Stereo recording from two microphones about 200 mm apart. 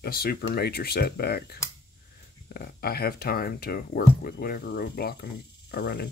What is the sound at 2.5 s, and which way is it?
Speech, 50° left (ahead or behind).